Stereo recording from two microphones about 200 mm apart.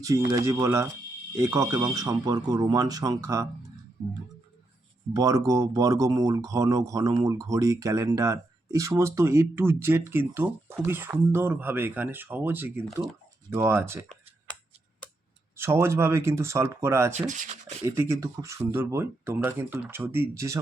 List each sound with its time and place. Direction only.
0.3 s speech: 15° right (ahead or behind)
5.1 s speech: 15° right (ahead or behind)
15.5 s speech: 10° right (ahead or behind)
17.2 s speech: 40° right (ahead or behind)
17.8 s speech: 15° right (ahead or behind)